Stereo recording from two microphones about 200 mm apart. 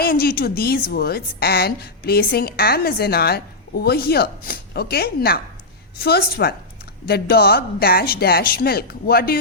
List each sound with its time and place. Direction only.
0.0 s a woman's voice: 45° left (ahead or behind)